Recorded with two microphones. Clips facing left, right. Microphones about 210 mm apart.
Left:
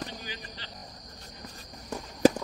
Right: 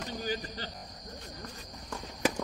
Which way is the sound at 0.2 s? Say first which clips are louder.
Right 8 dB; 45° right (ahead or behind).